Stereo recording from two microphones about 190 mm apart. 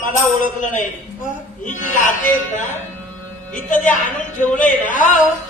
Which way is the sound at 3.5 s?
40° left (ahead or behind).